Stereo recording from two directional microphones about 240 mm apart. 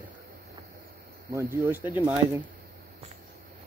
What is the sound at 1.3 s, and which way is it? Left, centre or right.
Speech, centre.